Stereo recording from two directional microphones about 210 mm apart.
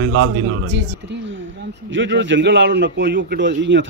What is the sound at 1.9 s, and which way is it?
A man's voice, 60° right (ahead or behind).